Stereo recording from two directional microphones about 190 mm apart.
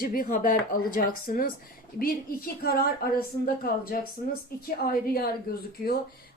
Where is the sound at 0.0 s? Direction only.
45° left (ahead or behind).